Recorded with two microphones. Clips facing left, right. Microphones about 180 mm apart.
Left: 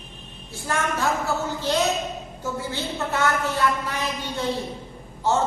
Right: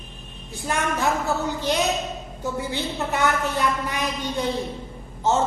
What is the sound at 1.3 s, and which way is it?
A woman's voice, 15° right (ahead or behind).